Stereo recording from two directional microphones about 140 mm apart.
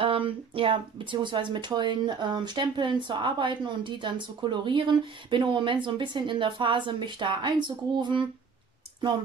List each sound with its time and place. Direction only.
0.0 s speech: 40° right (ahead or behind)